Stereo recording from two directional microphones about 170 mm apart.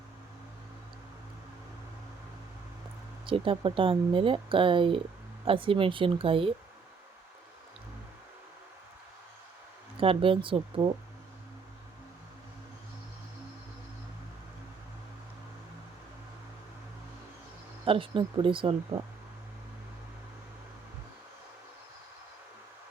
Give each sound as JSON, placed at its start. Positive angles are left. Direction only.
{"t": 3.2, "sound": "speech", "side_deg": -30}
{"t": 10.0, "sound": "speech", "side_deg": -30}
{"t": 17.8, "sound": "speech", "side_deg": -30}